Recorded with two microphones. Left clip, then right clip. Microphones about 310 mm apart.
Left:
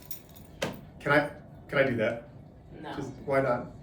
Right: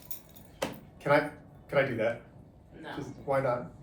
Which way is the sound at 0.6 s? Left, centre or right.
Centre.